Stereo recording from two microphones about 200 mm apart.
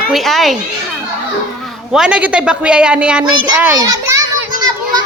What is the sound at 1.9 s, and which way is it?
A child's voice, 5° right (ahead or behind).